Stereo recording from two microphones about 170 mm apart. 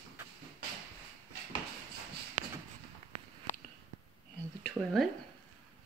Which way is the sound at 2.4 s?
50° right (ahead or behind).